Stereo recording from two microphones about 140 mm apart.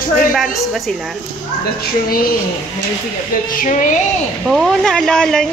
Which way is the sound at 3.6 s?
65° left (ahead or behind).